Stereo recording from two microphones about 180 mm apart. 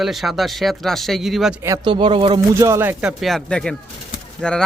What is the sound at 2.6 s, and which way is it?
A man's voice, 15° right (ahead or behind).